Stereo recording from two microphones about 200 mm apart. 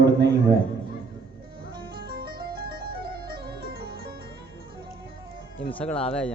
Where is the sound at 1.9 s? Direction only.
50° right (ahead or behind).